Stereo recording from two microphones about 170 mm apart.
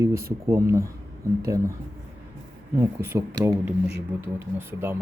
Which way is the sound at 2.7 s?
15° right (ahead or behind).